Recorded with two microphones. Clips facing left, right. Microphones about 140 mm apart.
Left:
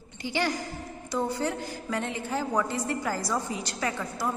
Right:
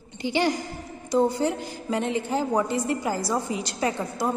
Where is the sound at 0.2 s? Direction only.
20° right (ahead or behind).